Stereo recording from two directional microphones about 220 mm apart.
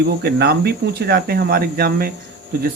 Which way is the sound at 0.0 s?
45° right (ahead or behind).